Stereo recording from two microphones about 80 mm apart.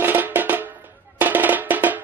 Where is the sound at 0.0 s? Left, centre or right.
Right.